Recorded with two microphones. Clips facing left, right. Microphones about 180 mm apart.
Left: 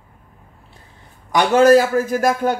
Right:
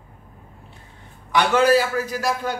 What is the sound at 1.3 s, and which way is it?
A man's voice, 45° left (ahead or behind).